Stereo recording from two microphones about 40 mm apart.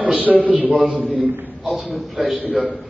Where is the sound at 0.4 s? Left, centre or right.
Right.